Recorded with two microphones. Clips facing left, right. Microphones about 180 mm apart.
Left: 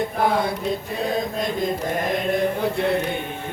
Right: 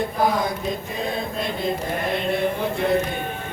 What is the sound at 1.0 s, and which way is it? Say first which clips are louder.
Mantra: left 3 dB; 45° left (ahead or behind).